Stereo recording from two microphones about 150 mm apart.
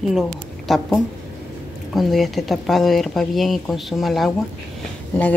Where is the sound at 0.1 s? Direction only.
Centre (ahead or behind).